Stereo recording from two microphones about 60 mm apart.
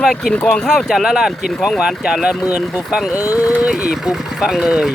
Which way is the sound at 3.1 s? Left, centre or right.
Left.